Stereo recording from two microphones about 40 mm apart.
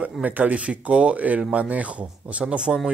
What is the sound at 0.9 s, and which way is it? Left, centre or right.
Speech, right.